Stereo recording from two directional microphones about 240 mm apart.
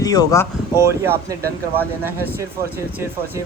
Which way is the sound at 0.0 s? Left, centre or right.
Centre.